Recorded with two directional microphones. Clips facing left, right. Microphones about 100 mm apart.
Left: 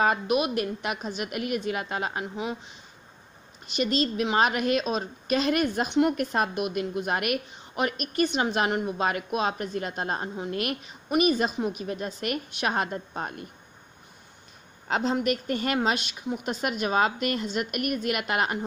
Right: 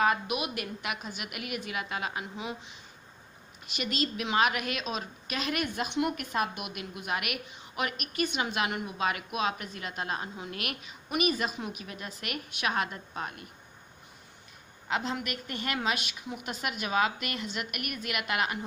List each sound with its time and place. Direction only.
0.0 s a woman's voice: 35° left (ahead or behind)
3.7 s a woman's voice: 30° left (ahead or behind)
14.9 s a woman's voice: 35° left (ahead or behind)